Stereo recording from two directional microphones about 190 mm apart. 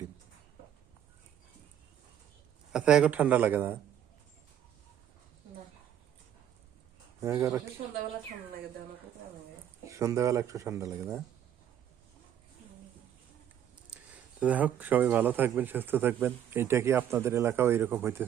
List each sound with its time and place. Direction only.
2.7 s speech: 5° right (ahead or behind)
7.2 s speech: 15° right (ahead or behind)
9.8 s speech: 15° right (ahead or behind)
13.7 s speech: 5° right (ahead or behind)